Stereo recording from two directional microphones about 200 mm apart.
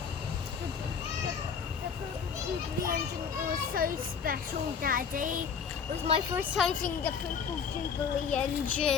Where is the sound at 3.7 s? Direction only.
45° right (ahead or behind).